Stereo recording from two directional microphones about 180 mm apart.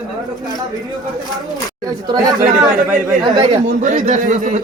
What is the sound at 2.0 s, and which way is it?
Speech, 20° right (ahead or behind).